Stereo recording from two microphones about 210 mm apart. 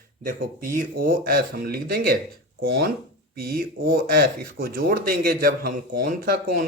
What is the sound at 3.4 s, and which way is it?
A man's voice, 45° right (ahead or behind).